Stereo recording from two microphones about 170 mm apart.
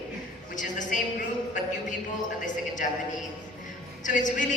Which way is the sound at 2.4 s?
45° left (ahead or behind).